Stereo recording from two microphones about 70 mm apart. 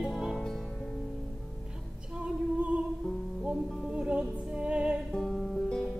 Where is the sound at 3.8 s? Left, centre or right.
Centre.